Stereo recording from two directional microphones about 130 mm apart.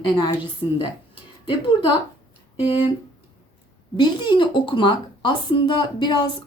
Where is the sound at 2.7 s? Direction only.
45° left (ahead or behind).